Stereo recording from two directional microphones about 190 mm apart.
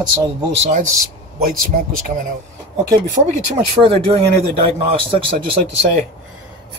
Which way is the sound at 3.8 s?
30° right (ahead or behind).